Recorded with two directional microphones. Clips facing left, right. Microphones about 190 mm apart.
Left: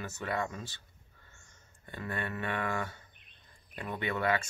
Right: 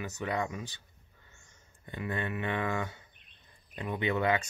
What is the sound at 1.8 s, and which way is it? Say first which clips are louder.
Speech: right 3 dB; 20° right (ahead or behind).